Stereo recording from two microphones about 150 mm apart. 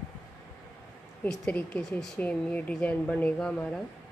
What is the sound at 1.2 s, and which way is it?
Speech, 10° left (ahead or behind).